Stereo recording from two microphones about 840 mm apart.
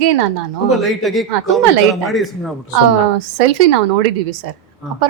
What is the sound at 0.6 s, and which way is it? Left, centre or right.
Speech, centre.